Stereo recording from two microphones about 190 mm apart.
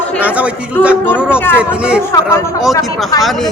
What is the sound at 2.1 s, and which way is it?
Speech, 15° left (ahead or behind).